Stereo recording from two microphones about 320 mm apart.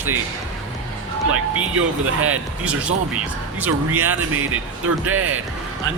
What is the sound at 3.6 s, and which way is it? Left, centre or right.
Speech, centre.